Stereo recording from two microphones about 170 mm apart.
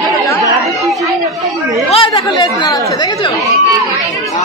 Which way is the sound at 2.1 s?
25° left (ahead or behind).